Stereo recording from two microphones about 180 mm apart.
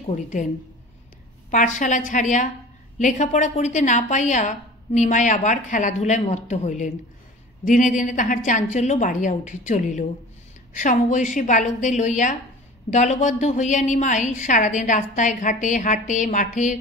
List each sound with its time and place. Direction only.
0.0 s a woman's voice: 40° left (ahead or behind)
1.5 s a woman's voice: 45° left (ahead or behind)